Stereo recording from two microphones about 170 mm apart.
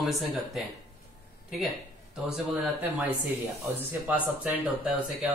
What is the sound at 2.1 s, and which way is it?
A man's voice, 5° right (ahead or behind).